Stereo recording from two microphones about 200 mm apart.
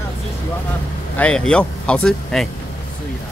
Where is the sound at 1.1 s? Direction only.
5° left (ahead or behind).